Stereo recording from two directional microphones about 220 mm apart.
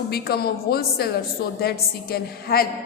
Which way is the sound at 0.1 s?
45° left (ahead or behind).